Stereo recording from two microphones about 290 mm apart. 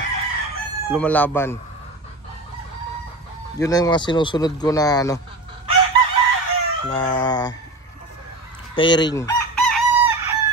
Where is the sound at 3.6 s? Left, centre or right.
Centre.